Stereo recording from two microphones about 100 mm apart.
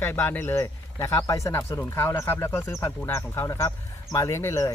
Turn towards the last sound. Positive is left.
turn(degrees=30)  # may be behind; listen again after turning